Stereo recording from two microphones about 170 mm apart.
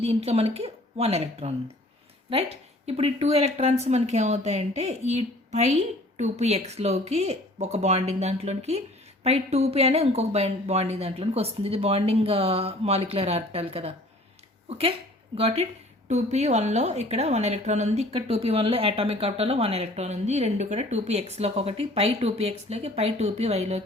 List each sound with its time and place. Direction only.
0.0 s a woman's voice: 35° right (ahead or behind)